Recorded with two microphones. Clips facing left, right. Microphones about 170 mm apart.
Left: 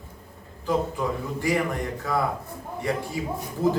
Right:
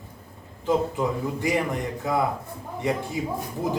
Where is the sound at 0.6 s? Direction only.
20° right (ahead or behind).